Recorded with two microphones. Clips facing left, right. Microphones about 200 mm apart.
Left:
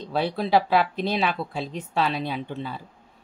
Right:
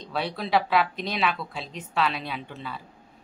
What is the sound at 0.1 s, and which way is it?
A woman's voice, 30° left (ahead or behind).